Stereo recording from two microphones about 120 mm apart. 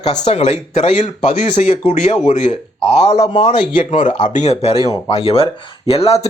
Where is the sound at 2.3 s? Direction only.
65° left (ahead or behind).